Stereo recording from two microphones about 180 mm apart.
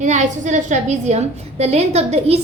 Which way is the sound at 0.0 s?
40° right (ahead or behind).